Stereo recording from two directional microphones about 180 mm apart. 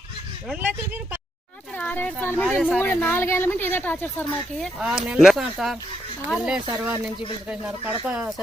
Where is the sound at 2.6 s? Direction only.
10° left (ahead or behind).